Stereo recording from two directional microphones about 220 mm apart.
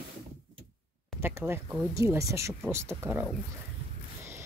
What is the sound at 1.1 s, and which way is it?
Speech, 10° right (ahead or behind).